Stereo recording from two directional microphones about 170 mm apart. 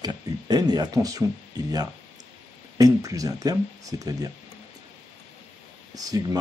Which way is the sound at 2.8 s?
20° right (ahead or behind).